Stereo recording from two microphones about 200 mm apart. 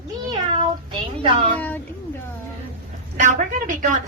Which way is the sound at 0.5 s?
30° right (ahead or behind).